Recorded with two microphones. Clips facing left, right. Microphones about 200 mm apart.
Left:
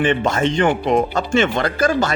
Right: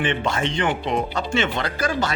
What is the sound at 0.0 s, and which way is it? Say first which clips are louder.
Speech: left 6 dB; 45° left (ahead or behind).